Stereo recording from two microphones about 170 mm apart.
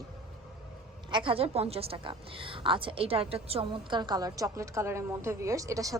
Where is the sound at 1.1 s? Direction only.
30° right (ahead or behind).